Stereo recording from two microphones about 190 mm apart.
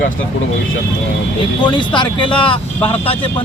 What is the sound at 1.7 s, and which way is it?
Speech, 25° left (ahead or behind).